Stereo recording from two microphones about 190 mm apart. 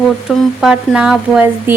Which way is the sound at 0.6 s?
5° right (ahead or behind).